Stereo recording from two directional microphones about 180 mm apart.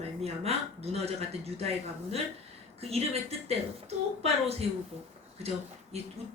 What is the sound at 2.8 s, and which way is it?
Speech, 35° right (ahead or behind).